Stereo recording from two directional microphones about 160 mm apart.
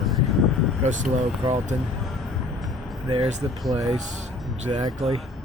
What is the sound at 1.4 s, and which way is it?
Speech, 45° right (ahead or behind).